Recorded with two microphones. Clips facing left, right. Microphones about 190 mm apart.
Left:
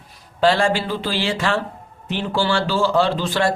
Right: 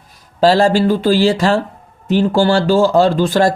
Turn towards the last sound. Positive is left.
turn(degrees=-45)  # may be behind; listen again after turning